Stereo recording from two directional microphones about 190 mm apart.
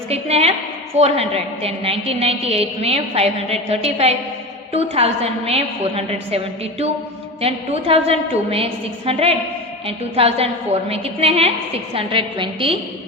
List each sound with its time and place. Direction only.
0.1 s a woman's voice: 35° right (ahead or behind)